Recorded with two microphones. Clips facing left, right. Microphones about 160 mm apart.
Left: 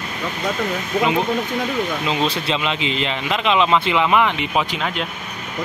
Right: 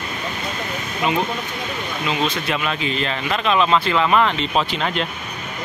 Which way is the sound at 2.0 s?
30° left (ahead or behind).